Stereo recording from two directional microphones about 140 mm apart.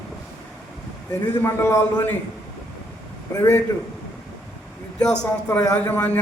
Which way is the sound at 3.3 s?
25° left (ahead or behind).